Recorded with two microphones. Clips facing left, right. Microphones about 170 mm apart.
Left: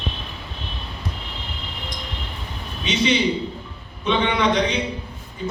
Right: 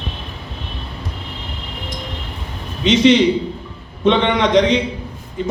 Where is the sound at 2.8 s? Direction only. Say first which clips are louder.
Right 9 dB; 90° right.